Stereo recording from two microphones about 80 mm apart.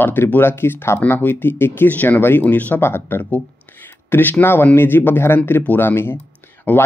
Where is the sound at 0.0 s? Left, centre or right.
Left.